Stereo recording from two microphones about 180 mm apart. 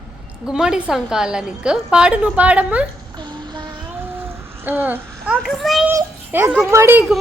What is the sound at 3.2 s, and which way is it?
Child singing, 25° right (ahead or behind).